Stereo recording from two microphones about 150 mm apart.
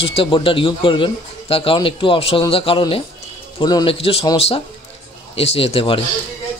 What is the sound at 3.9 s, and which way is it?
Speech, 40° left (ahead or behind).